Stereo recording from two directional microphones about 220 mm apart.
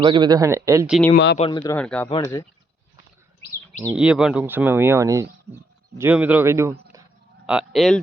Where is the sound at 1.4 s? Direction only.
25° left (ahead or behind).